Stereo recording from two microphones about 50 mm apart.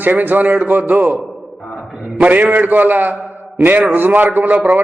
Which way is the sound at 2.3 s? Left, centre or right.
Right.